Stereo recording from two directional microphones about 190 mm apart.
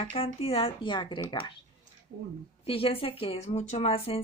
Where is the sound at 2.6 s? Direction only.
30° left (ahead or behind).